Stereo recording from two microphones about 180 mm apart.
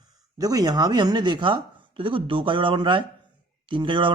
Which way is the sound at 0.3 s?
20° right (ahead or behind).